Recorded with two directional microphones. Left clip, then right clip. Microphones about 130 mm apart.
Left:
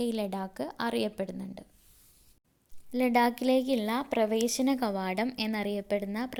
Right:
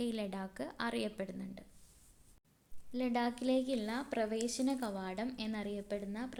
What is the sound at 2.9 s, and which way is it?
A woman's voice, 55° left (ahead or behind).